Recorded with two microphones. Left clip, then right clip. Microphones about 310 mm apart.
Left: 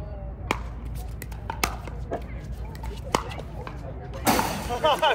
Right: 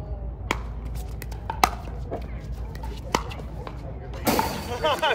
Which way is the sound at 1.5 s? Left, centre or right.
Right.